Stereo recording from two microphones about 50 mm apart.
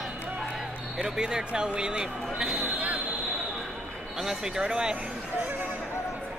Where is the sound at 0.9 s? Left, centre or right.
Centre.